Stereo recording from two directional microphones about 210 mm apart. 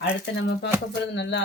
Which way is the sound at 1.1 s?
60° left (ahead or behind).